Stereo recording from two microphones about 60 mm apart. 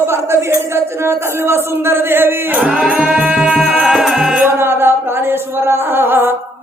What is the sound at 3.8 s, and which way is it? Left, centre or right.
Music, centre.